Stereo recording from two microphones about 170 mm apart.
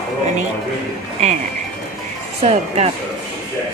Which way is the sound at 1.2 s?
40° right (ahead or behind).